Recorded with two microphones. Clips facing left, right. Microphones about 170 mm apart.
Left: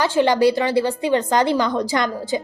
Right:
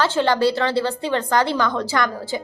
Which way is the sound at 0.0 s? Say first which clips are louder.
Left 2 dB; 15° left (ahead or behind).